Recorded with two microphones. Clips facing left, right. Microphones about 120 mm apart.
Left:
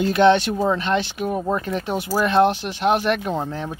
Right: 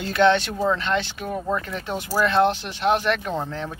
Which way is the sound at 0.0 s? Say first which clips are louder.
Left 3 dB; 15° left (ahead or behind).